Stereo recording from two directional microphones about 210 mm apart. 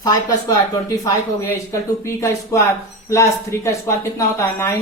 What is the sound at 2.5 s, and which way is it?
Speech, 15° left (ahead or behind).